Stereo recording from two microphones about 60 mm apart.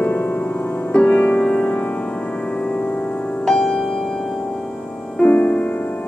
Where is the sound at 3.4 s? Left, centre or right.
Centre.